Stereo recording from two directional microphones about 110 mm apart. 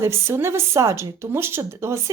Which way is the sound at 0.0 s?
25° right (ahead or behind).